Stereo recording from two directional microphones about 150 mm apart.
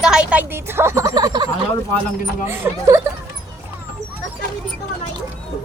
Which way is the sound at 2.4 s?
15° right (ahead or behind).